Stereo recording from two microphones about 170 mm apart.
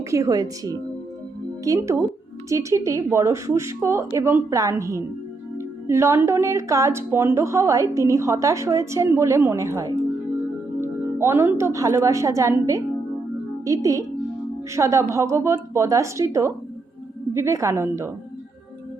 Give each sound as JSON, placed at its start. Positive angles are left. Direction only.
{"t": 0.0, "sound": "a woman's voice", "side_deg": -20}